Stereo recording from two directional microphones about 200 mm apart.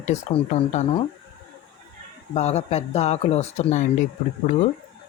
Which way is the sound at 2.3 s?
35° left (ahead or behind).